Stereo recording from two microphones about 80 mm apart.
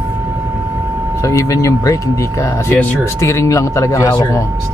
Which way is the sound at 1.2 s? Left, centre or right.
Left.